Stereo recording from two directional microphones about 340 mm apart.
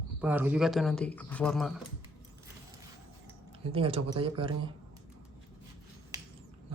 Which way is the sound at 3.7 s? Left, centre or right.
Centre.